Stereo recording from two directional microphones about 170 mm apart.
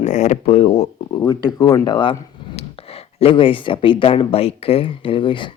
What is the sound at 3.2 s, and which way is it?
Speech, 30° left (ahead or behind).